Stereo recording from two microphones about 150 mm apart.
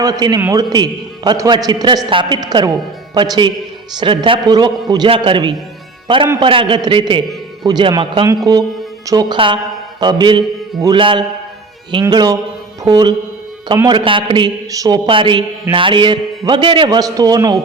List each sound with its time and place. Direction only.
0.0 s a man's voice: 25° right (ahead or behind)